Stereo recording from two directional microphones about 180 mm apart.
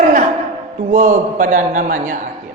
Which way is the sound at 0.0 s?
45° right (ahead or behind).